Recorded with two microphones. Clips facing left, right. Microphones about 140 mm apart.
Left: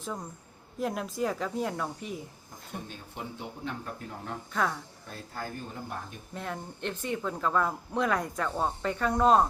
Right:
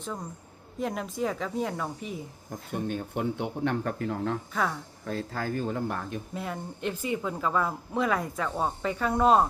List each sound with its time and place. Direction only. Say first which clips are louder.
0.8 s speech: right 1 dB; centre (ahead or behind)
2.8 s speech: right 11 dB; 60° right (ahead or behind); by 4.4 s 90° right
4.5 s speech: left 3 dB; centre (ahead or behind)
5.0 s speech: right 8 dB; 90° right
6.3 s speech: right 2 dB; 5° right (ahead or behind)